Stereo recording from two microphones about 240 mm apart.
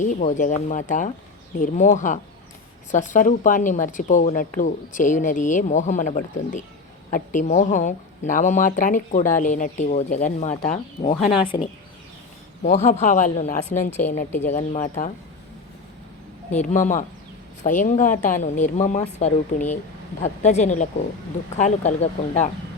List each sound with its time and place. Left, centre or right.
0.0 s speech: left
11.2 s speech: centre
12.6 s speech: left
16.6 s speech: left